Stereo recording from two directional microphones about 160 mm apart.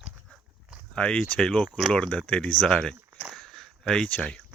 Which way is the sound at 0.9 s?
5° left (ahead or behind).